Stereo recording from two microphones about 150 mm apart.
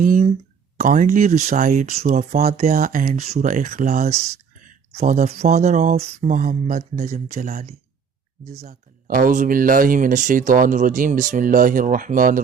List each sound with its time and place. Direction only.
0.0 s speech: 60° right (ahead or behind)
7.1 s speech: 50° right (ahead or behind)
8.6 s speech: 75° right (ahead or behind)